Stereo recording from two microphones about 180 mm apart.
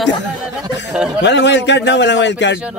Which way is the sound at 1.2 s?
75° left (ahead or behind).